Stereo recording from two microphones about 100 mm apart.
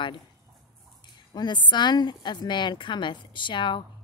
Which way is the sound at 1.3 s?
45° left (ahead or behind).